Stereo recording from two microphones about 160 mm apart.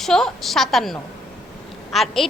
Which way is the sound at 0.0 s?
Centre (ahead or behind).